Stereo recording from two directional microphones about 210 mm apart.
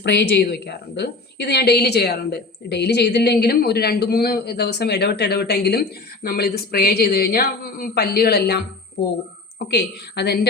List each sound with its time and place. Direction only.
0.0 s a woman's voice: 55° left (ahead or behind)
9.6 s a woman's voice: 50° left (ahead or behind)